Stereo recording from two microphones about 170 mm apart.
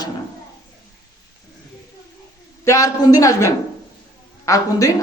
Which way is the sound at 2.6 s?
20° left (ahead or behind).